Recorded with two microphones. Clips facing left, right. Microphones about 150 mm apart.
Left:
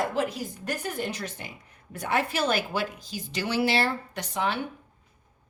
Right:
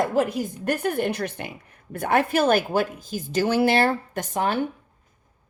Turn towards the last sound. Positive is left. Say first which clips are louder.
# right 4 dB
turn(degrees=-45)  # may be behind; listen again after turning